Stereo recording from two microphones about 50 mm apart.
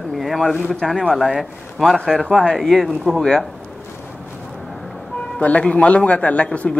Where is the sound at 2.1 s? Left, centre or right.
Centre.